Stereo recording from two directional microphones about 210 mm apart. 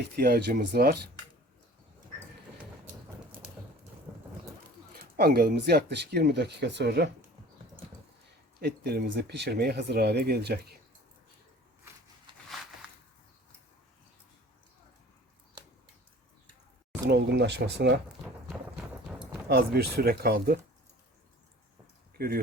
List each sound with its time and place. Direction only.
0.2 s speech: 50° right (ahead or behind)
4.1 s thunder: 5° right (ahead or behind)
5.1 s speech: 45° right (ahead or behind)
8.6 s speech: 50° right (ahead or behind)
17.1 s speech: 55° right (ahead or behind)
19.2 s a sound: 10° right (ahead or behind)
19.5 s speech: 50° right (ahead or behind)
22.2 s speech: 45° right (ahead or behind)